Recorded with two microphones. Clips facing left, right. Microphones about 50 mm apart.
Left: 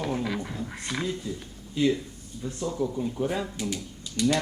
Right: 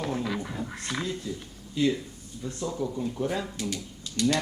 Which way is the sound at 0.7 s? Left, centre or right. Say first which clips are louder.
Left 3 dB; centre.